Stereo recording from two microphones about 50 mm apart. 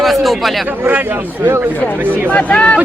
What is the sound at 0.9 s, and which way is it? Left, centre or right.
A man's voice, right.